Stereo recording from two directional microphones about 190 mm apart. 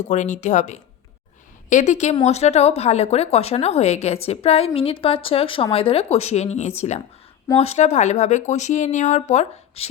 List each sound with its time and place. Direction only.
0.1 s a woman's voice: 40° left (ahead or behind)